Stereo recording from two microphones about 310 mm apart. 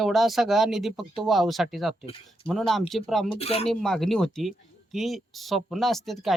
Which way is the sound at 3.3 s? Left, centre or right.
Centre.